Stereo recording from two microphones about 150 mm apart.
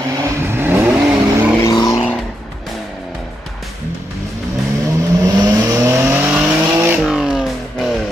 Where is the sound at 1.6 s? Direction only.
30° left (ahead or behind).